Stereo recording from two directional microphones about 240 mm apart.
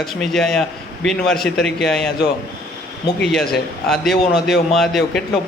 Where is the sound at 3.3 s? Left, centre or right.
Centre.